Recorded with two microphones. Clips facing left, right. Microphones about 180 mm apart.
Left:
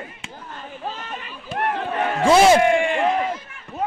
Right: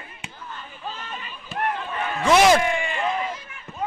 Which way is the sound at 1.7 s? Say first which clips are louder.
Left 5 dB; 70° left (ahead or behind).